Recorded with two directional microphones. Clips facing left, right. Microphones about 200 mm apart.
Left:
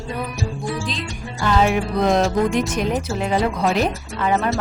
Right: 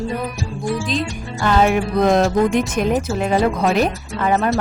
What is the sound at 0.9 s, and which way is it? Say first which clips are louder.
A woman's voice: right 6 dB; 50° right (ahead or behind).